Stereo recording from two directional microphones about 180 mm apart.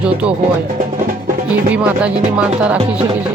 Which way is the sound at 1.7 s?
5° right (ahead or behind).